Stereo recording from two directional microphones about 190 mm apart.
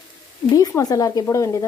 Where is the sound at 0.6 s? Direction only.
20° left (ahead or behind).